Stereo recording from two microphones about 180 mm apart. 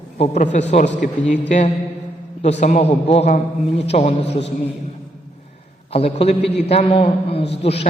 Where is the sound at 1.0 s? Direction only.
40° left (ahead or behind).